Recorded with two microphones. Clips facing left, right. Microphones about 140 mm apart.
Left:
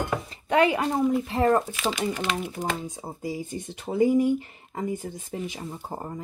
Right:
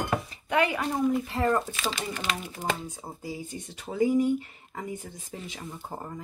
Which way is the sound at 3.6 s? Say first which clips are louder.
Left 3 dB; 25° left (ahead or behind).